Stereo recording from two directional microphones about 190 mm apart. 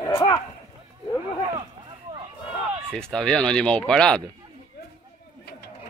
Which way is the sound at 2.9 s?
5° left (ahead or behind).